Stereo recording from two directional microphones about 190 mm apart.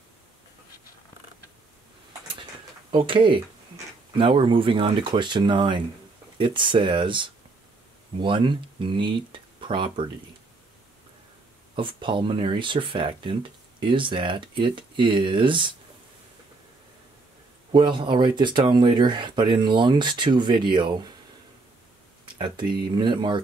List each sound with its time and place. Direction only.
2.9 s speech: 25° right (ahead or behind)
11.7 s speech: 25° right (ahead or behind)
17.6 s speech: 25° right (ahead or behind)
22.4 s speech: 25° right (ahead or behind)